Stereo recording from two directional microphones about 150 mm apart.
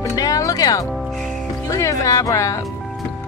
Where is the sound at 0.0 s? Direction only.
20° left (ahead or behind).